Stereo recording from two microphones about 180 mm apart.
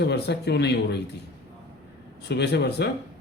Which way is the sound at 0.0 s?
70° left (ahead or behind).